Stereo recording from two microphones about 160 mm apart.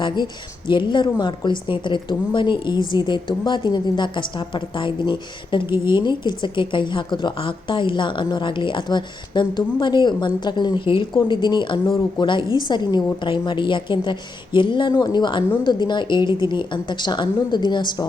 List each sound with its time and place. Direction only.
0.7 s a woman's voice: 30° left (ahead or behind)
5.6 s a woman's voice: 15° right (ahead or behind)
5.9 s a woman's voice: 30° left (ahead or behind)